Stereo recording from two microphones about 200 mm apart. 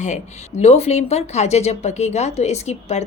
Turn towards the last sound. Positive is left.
turn(degrees=35)  # may be behind; listen again after turning